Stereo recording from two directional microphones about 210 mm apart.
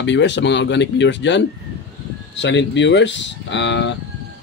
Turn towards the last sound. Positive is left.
turn(degrees=60)  # may be behind; listen again after turning